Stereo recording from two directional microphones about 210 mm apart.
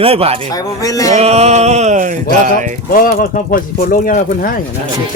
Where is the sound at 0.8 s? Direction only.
15° left (ahead or behind).